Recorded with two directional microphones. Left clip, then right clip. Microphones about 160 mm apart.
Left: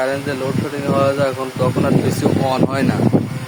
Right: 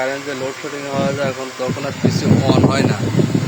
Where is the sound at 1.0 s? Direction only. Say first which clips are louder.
Left 3 dB; 30° left (ahead or behind).